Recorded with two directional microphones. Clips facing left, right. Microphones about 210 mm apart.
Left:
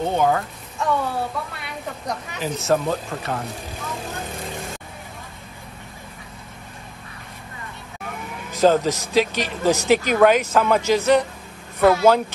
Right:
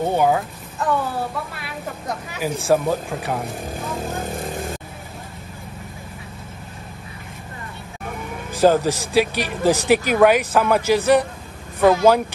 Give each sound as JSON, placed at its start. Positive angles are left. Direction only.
{"t": 0.1, "sound": "speech", "side_deg": -10}
{"t": 8.5, "sound": "speech", "side_deg": -10}